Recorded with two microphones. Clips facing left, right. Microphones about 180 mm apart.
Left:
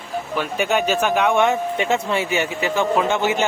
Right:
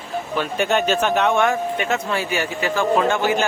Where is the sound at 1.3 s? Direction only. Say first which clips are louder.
Left 1 dB; 20° left (ahead or behind).